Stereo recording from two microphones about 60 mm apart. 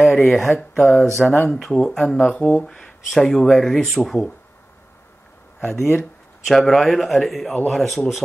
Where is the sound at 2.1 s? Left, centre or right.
Centre.